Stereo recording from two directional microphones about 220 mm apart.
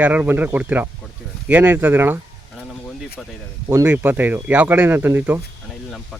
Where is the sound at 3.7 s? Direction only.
10° right (ahead or behind).